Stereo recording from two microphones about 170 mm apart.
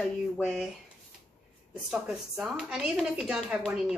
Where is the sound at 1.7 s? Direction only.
5° right (ahead or behind).